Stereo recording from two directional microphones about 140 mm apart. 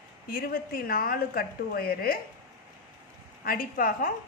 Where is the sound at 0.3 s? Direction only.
90° left.